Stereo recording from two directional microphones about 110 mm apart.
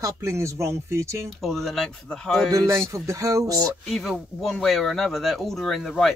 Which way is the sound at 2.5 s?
25° right (ahead or behind).